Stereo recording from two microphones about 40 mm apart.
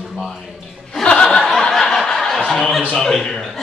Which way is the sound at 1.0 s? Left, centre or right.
Left.